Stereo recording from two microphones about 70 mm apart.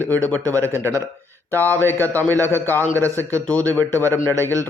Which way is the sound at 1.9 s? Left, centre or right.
Right.